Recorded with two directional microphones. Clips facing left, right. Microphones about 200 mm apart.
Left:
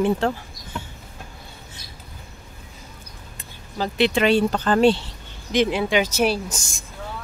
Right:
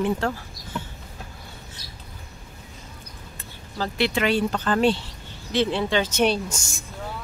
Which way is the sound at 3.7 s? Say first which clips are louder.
Left 4 dB; 20° left (ahead or behind).